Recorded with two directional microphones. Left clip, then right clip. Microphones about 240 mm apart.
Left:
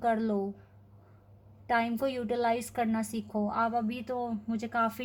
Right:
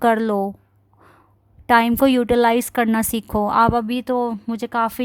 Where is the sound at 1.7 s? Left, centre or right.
Right.